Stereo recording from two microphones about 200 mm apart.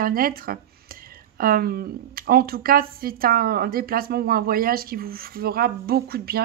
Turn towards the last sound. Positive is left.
turn(degrees=-50)  # may be behind; listen again after turning